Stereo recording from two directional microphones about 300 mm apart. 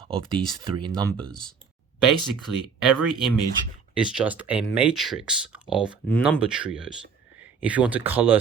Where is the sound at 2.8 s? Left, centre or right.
Centre.